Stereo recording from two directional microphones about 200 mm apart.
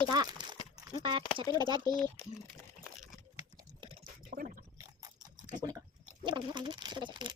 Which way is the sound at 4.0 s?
45° right (ahead or behind).